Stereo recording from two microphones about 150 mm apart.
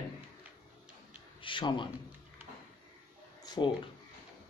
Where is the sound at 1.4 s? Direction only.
35° left (ahead or behind).